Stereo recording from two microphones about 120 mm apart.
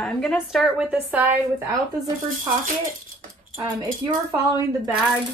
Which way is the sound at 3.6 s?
40° right (ahead or behind).